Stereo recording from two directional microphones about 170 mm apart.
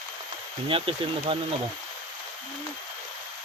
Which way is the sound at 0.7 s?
30° right (ahead or behind).